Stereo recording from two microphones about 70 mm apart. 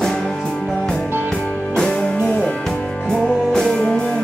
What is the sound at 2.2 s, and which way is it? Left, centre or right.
Music, left.